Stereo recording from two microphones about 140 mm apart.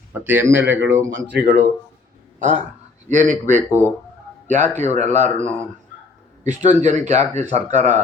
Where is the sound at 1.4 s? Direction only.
90° right.